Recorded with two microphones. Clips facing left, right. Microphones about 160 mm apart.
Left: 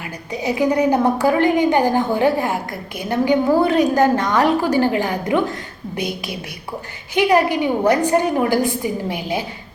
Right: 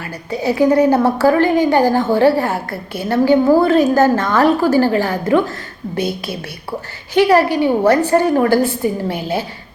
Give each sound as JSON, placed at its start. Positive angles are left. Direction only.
{"t": 0.3, "sound": "a woman's voice", "side_deg": 15}